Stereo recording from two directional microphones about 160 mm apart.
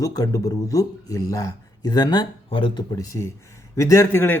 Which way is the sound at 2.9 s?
20° left (ahead or behind).